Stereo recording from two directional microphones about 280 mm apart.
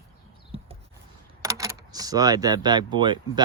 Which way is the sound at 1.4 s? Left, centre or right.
Centre.